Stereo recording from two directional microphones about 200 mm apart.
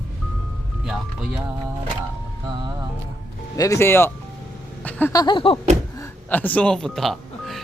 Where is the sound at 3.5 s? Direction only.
15° left (ahead or behind).